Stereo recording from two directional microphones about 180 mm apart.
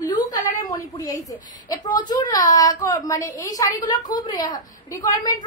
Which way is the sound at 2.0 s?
20° left (ahead or behind).